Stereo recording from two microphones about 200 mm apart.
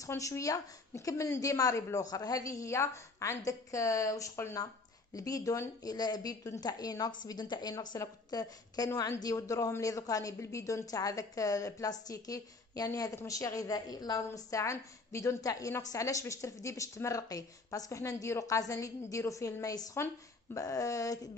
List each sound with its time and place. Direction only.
0.0 s a woman's voice: 15° left (ahead or behind)